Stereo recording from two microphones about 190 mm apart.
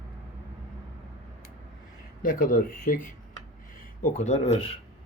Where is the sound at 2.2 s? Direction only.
45° left (ahead or behind).